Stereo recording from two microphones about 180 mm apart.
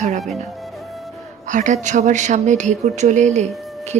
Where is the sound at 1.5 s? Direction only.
45° right (ahead or behind).